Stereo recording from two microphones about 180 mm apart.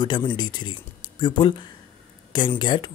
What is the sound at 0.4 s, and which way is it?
Speech, 25° left (ahead or behind).